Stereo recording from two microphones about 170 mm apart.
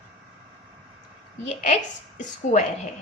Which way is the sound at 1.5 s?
40° left (ahead or behind).